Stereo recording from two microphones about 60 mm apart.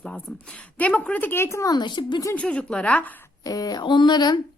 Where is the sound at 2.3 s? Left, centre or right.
Left.